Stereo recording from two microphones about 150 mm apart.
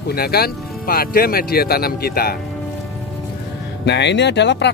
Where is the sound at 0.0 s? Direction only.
90° left.